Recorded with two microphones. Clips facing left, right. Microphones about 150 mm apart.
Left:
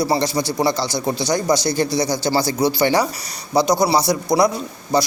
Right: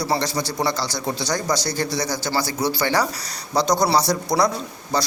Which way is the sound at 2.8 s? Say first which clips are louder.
Left 4 dB; 30° left (ahead or behind).